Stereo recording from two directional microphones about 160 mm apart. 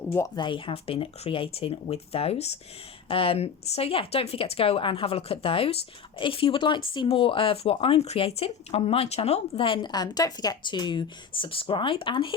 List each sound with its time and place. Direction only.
0.3 s speech: 30° left (ahead or behind)